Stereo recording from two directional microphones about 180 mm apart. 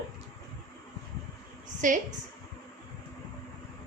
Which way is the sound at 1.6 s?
45° right (ahead or behind).